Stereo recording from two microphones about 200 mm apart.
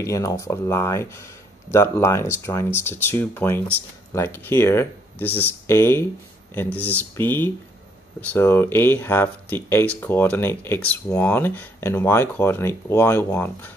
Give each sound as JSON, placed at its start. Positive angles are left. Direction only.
{"t": 0.0, "sound": "speech", "side_deg": 15}